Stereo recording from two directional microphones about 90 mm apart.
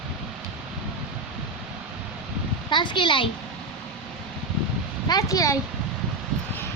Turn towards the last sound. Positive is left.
turn(degrees=40)  # may be behind; listen again after turning